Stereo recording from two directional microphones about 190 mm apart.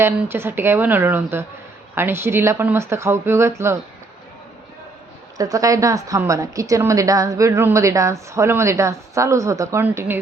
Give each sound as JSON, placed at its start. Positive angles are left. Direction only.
{"t": 0.0, "sound": "a woman's voice", "side_deg": -10}
{"t": 5.4, "sound": "a woman's voice", "side_deg": -20}